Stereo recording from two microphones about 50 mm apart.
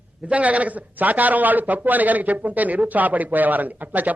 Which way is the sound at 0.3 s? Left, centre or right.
Right.